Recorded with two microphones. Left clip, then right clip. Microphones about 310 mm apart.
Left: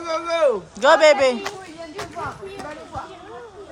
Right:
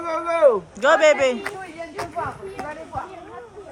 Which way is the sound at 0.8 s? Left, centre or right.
Centre.